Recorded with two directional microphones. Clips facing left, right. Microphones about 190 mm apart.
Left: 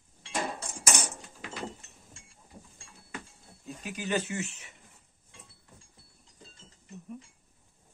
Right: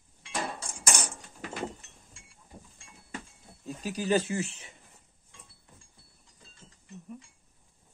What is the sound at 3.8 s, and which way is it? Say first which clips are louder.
Speech: right 5 dB; 35° right (ahead or behind).